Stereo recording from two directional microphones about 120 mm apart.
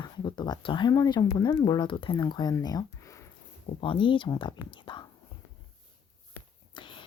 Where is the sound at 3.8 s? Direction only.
45° left (ahead or behind).